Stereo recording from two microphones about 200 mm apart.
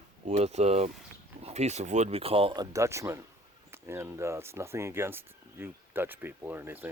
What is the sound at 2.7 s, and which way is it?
Speech, 15° right (ahead or behind).